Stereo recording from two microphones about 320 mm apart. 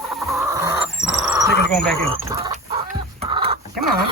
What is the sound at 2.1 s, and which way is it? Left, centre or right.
Speech, centre.